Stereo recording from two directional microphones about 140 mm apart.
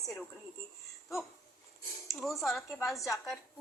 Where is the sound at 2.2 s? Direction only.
Centre (ahead or behind).